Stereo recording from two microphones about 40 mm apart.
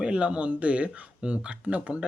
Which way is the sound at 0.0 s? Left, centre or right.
Right.